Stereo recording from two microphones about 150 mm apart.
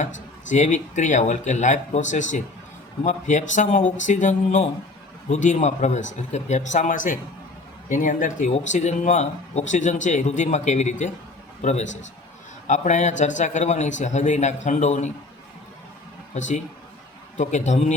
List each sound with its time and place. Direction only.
0.5 s speech: 50° left (ahead or behind)
16.3 s a man's voice: 55° left (ahead or behind)